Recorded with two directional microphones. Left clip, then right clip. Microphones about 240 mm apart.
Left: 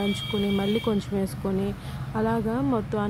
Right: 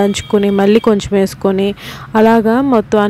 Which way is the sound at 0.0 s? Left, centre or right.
Right.